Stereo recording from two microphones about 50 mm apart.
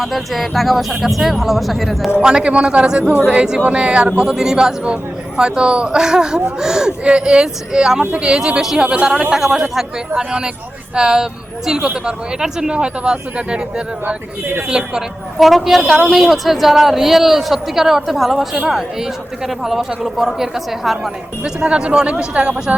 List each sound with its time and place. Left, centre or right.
0.0 s a man's voice: centre
2.1 s speech: centre
8.9 s speech: right
15.4 s a man's voice: centre
21.4 s speech: centre